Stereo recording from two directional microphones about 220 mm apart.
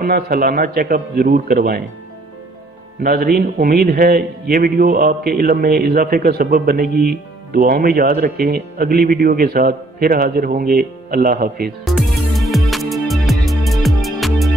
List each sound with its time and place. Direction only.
0.0 s a man's voice: 45° right (ahead or behind)
3.0 s a man's voice: 45° right (ahead or behind)
11.8 s music: centre (ahead or behind)